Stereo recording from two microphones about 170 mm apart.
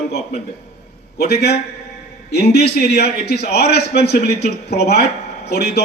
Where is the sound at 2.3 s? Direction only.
70° left (ahead or behind).